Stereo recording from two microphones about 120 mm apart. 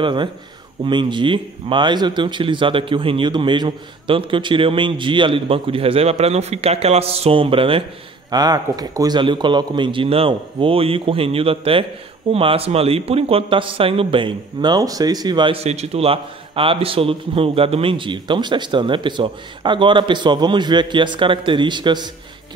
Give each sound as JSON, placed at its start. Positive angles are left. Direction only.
{"t": 0.0, "sound": "a man's voice", "side_deg": -40}
{"t": 8.3, "sound": "speech", "side_deg": -35}
{"t": 15.5, "sound": "a man's voice", "side_deg": -60}